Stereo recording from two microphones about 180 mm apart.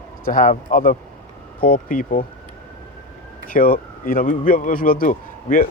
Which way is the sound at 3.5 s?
50° left (ahead or behind).